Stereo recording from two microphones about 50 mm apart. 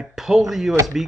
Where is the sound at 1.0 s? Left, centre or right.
Centre.